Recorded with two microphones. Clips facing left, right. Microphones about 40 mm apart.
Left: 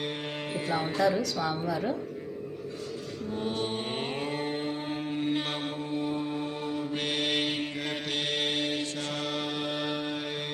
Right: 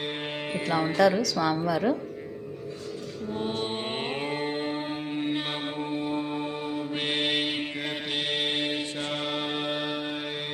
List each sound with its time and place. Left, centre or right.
0.0 s music: right
0.9 s a woman's voice: right
3.3 s mantra: centre
5.6 s mantra: right
7.3 s mantra: centre